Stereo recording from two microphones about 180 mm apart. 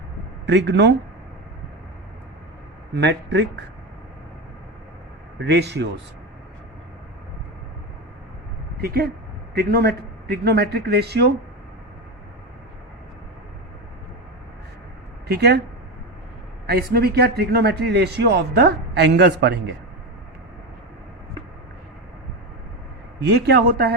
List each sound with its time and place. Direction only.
0.4 s speech: 75° right (ahead or behind)
2.9 s speech: 75° right (ahead or behind)
5.4 s speech: 70° right (ahead or behind)
8.8 s a man's voice: 60° right (ahead or behind)
15.3 s a man's voice: 65° right (ahead or behind)
16.6 s a man's voice: 60° right (ahead or behind)
23.3 s a man's voice: 65° right (ahead or behind)